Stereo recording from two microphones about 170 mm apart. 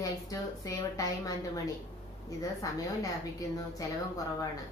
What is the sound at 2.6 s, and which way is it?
A woman's voice, 20° left (ahead or behind).